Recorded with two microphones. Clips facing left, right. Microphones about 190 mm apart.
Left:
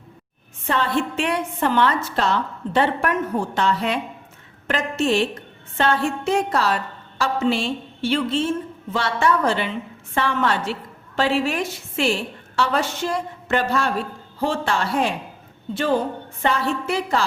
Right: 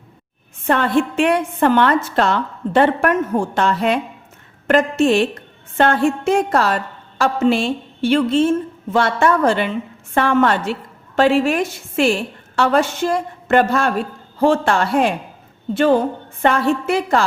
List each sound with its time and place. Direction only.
0.7 s a woman's voice: 55° right (ahead or behind)
16.4 s a woman's voice: 55° right (ahead or behind)